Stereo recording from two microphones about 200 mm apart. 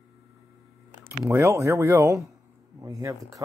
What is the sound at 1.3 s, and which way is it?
Speech, 15° right (ahead or behind).